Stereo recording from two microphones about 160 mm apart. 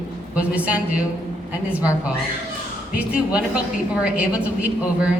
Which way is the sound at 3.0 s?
10° right (ahead or behind).